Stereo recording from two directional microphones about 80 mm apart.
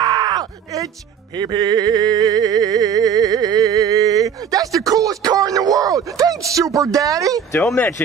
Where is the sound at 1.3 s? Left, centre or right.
Right.